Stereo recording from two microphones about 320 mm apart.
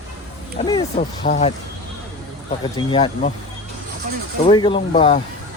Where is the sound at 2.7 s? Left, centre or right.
Centre.